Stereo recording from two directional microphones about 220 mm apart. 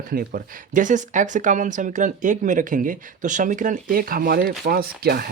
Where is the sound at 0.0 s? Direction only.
40° right (ahead or behind).